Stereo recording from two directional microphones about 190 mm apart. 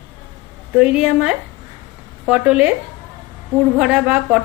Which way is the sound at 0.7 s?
5° right (ahead or behind).